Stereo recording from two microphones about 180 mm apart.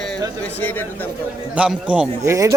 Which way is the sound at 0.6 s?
10° left (ahead or behind).